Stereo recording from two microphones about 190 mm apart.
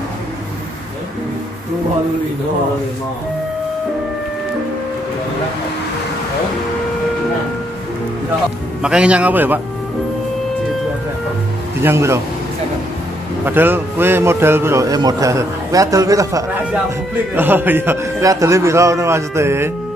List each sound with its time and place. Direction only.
8.8 s a man's voice: 5° right (ahead or behind)
11.8 s a man's voice: 15° right (ahead or behind)
13.5 s a man's voice: 10° right (ahead or behind)